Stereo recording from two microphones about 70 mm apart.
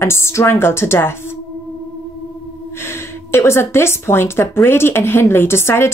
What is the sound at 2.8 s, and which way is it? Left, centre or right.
Speech, left.